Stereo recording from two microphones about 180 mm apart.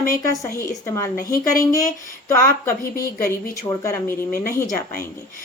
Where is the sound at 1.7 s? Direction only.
20° left (ahead or behind).